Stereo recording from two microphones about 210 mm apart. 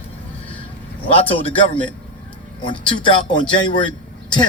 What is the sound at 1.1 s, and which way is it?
Speech, 25° left (ahead or behind).